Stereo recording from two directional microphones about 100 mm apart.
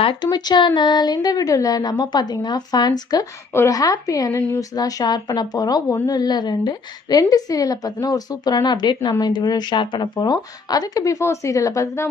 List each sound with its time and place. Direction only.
0.2 s a woman's voice: 45° left (ahead or behind)